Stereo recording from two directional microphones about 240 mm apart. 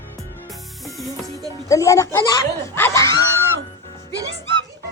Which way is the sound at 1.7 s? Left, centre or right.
Centre.